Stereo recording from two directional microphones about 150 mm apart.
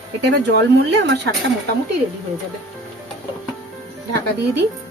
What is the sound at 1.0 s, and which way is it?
Speech, 90° right.